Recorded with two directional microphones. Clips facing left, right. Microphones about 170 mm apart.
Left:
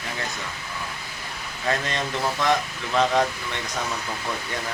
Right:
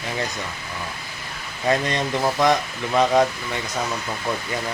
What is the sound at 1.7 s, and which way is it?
Speech, 15° right (ahead or behind).